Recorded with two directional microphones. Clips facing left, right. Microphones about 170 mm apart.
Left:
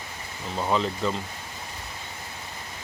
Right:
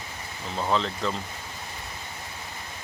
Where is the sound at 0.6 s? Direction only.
5° left (ahead or behind).